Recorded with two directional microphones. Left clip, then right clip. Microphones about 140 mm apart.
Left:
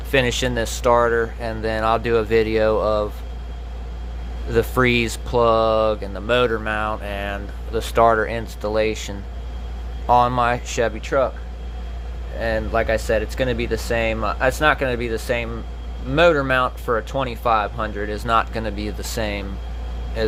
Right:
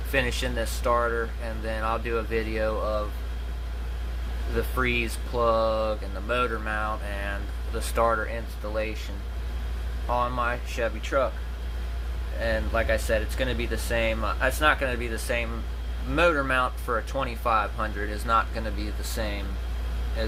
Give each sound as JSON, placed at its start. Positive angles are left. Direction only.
{"t": 0.1, "sound": "speech", "side_deg": 65}
{"t": 4.5, "sound": "speech", "side_deg": 90}
{"t": 10.2, "sound": "speech", "side_deg": 90}
{"t": 11.0, "sound": "speech", "side_deg": 50}
{"t": 12.4, "sound": "speech", "side_deg": 65}